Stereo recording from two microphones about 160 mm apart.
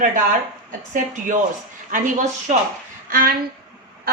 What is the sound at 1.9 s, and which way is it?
Speech, 55° right (ahead or behind).